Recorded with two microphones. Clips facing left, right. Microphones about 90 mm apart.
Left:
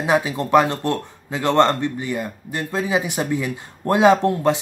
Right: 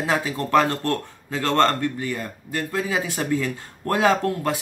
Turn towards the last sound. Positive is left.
turn(degrees=20)  # may be behind; listen again after turning